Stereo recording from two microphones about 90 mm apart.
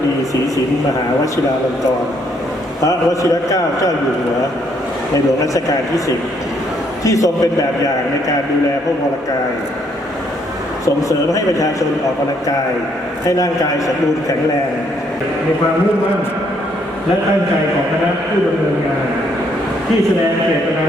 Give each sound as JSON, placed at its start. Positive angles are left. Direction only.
{"t": 2.8, "sound": "a man's voice", "side_deg": 35}
{"t": 7.0, "sound": "a man's voice", "side_deg": 35}
{"t": 10.8, "sound": "a man's voice", "side_deg": 40}
{"t": 13.3, "sound": "a man's voice", "side_deg": 40}